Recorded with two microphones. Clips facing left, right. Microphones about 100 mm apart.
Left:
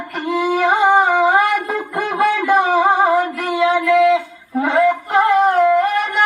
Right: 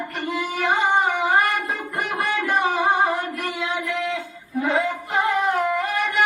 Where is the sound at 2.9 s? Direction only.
90° left.